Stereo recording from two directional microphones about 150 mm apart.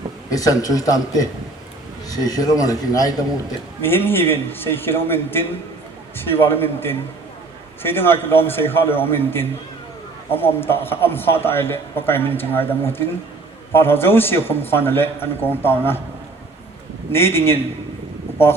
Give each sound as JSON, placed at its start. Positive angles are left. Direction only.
{"t": 0.3, "sound": "a man's voice", "side_deg": 25}
{"t": 17.1, "sound": "a man's voice", "side_deg": 15}